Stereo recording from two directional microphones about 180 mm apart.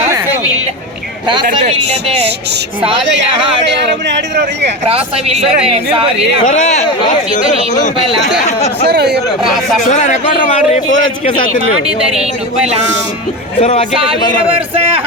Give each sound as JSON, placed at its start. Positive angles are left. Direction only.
{"t": 3.7, "sound": "speech", "side_deg": -75}
{"t": 4.9, "sound": "speech", "side_deg": -30}
{"t": 6.4, "sound": "speech", "side_deg": 40}
{"t": 8.9, "sound": "speech", "side_deg": -65}
{"t": 9.8, "sound": "a man's voice", "side_deg": 40}
{"t": 11.9, "sound": "speech", "side_deg": -5}
{"t": 13.6, "sound": "a man's voice", "side_deg": 35}
{"t": 13.9, "sound": "speech", "side_deg": -30}